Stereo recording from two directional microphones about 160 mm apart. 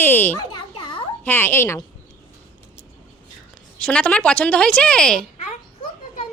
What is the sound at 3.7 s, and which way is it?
Speech, 5° left (ahead or behind).